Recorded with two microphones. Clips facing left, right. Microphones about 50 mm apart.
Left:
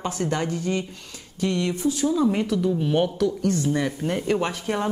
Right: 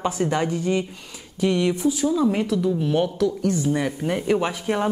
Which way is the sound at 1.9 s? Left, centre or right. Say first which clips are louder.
Right 1 dB; centre.